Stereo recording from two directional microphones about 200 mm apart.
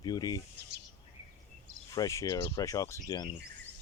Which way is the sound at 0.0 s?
20° left (ahead or behind).